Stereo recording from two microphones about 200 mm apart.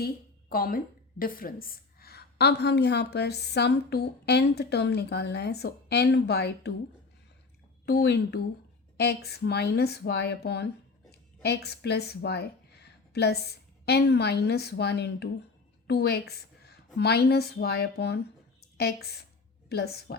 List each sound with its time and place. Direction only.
0.0 s a woman's voice: 50° left (ahead or behind)
7.9 s a woman's voice: 55° left (ahead or behind)